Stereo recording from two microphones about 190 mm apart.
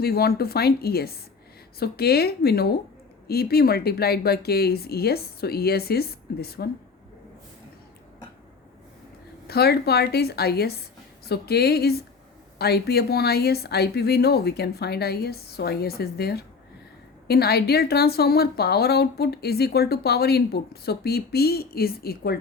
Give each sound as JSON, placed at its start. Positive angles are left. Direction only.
{"t": 0.0, "sound": "speech", "side_deg": 55}
{"t": 9.5, "sound": "speech", "side_deg": 55}